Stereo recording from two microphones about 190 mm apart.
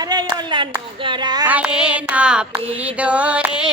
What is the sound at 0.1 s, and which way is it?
Speech, 25° right (ahead or behind).